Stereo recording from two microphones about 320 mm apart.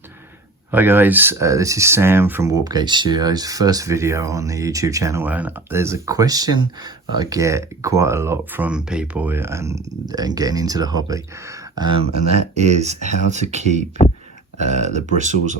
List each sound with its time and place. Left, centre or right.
0.7 s speech: centre; by 15.5 s right